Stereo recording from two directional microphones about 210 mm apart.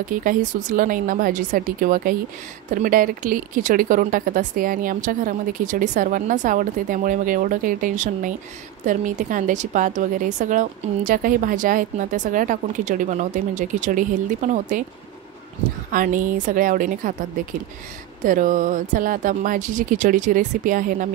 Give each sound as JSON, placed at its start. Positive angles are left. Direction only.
{"t": 0.1, "sound": "a woman's voice", "side_deg": -40}
{"t": 15.9, "sound": "a woman's voice", "side_deg": -40}
{"t": 18.2, "sound": "a woman's voice", "side_deg": -40}